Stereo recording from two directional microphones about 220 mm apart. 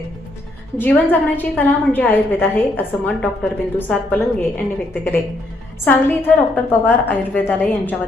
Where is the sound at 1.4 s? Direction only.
10° left (ahead or behind).